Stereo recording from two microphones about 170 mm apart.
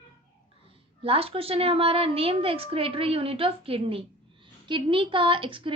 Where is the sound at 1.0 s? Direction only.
35° right (ahead or behind).